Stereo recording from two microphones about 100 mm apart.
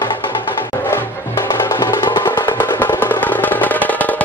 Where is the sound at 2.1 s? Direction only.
50° left (ahead or behind).